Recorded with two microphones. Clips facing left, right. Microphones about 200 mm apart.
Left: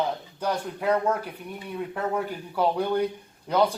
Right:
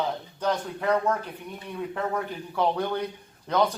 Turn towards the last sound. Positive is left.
turn(degrees=10)  # may be behind; listen again after turning